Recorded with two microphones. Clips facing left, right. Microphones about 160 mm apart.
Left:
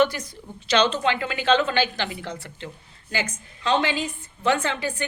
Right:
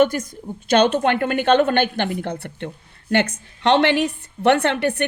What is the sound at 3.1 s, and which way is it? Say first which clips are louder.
A woman's voice: right 10 dB; 70° right (ahead or behind).